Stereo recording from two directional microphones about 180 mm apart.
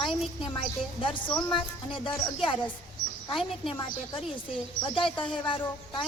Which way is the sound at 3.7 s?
30° left (ahead or behind).